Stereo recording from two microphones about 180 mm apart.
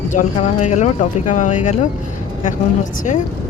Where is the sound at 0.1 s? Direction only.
40° left (ahead or behind).